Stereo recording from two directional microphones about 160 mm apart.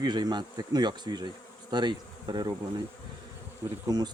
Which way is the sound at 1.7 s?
25° right (ahead or behind).